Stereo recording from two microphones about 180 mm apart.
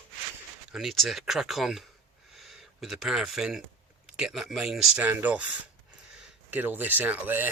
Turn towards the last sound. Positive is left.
turn(degrees=-10)  # may be behind; listen again after turning